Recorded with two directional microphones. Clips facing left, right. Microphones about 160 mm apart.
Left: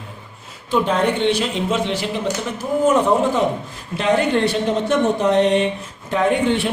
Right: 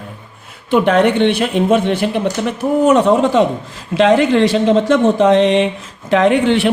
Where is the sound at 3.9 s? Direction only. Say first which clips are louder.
Right 6 dB; 90° right.